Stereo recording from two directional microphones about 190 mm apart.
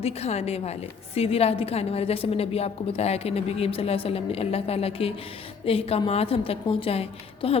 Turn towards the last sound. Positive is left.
turn(degrees=30)  # may be behind; listen again after turning